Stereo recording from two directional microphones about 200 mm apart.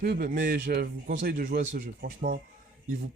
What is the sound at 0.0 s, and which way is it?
A man's voice, 50° right (ahead or behind).